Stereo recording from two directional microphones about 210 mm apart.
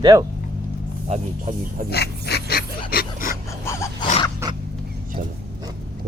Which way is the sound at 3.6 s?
15° left (ahead or behind).